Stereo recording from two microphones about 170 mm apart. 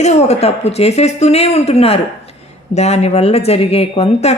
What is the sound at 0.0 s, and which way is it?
Speech, 40° left (ahead or behind).